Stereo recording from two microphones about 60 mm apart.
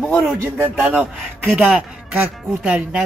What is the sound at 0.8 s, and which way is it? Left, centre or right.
Speech, right.